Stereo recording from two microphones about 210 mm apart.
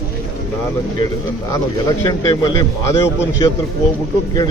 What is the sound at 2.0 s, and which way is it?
Speech, 20° left (ahead or behind).